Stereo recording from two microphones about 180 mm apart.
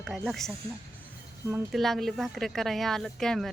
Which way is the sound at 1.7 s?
Centre (ahead or behind).